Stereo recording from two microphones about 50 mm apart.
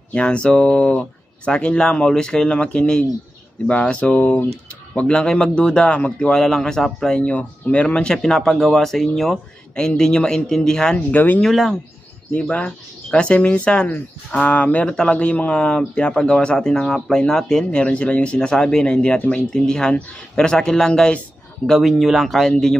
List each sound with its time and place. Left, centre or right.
0.1 s a man's voice: left
6.3 s a man's voice: centre
7.2 s speech: left
8.2 s a man's voice: centre
11.0 s speech: left
11.4 s speech: centre
12.3 s a man's voice: left
21.7 s a man's voice: centre